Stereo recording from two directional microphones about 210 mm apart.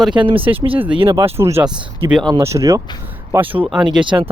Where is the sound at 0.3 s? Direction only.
25° right (ahead or behind).